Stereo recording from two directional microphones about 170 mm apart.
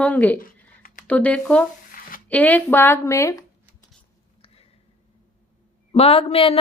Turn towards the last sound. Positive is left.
turn(degrees=35)  # may be behind; listen again after turning